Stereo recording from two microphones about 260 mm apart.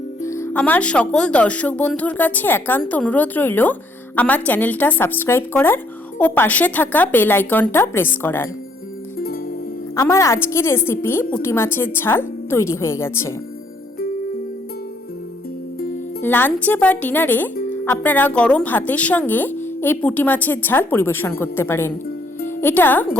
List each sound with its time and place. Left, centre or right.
0.2 s speech: centre
9.1 s music: left
9.9 s speech: centre
16.2 s speech: centre